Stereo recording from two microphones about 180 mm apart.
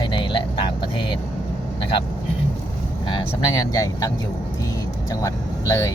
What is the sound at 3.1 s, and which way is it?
Speech, 25° left (ahead or behind).